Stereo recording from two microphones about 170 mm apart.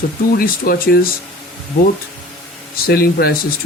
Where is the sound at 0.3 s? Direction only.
60° left (ahead or behind).